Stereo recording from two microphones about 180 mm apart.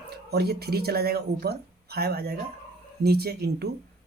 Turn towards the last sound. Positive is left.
turn(degrees=-60)  # may be behind; listen again after turning